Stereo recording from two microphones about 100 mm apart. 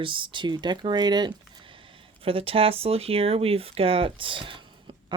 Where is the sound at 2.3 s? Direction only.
65° right (ahead or behind).